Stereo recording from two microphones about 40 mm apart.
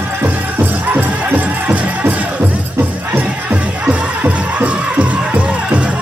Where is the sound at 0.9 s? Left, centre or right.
Right.